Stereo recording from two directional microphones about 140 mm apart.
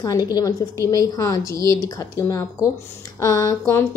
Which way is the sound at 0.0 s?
25° left (ahead or behind).